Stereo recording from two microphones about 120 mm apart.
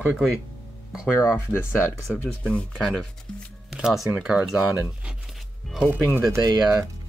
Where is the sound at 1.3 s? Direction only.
20° left (ahead or behind).